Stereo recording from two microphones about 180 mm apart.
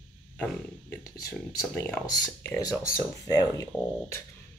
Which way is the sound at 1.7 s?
10° left (ahead or behind).